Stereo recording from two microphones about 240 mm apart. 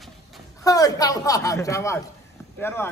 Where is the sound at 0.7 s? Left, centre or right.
Centre.